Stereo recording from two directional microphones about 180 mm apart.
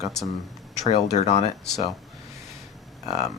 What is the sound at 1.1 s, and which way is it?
Speech, 40° left (ahead or behind).